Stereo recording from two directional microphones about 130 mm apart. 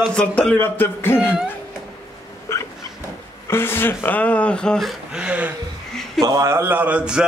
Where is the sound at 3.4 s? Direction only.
20° left (ahead or behind); by 5.5 s 10° right (ahead or behind).